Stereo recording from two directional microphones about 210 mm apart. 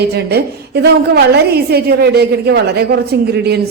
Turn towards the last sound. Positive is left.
turn(degrees=-50)  # may be behind; listen again after turning